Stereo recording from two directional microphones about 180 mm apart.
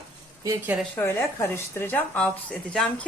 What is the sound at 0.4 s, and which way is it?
Speech, 20° right (ahead or behind).